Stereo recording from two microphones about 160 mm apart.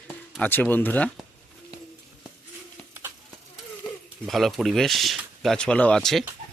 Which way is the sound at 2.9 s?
15° right (ahead or behind).